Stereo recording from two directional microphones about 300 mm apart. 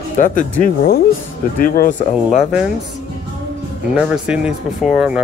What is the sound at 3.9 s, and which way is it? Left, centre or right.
Speech, centre.